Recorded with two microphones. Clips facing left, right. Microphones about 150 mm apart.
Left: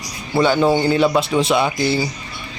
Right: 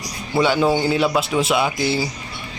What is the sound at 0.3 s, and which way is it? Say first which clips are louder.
Speech: left 2 dB; 5° right (ahead or behind).